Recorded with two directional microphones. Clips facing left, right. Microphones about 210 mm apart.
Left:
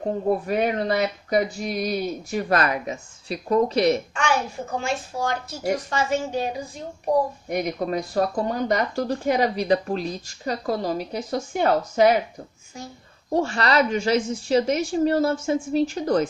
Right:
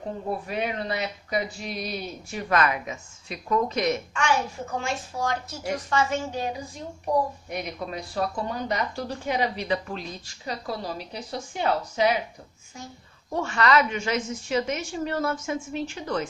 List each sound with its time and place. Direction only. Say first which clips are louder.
0.0 s speech: left 8 dB; 45° left (ahead or behind)
7.4 s speech: left 7 dB; 45° left (ahead or behind)
13.3 s speech: left 1 dB; 35° left (ahead or behind)